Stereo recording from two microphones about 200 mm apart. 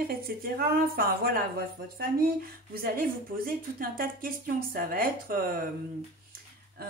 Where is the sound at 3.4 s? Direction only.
45° right (ahead or behind).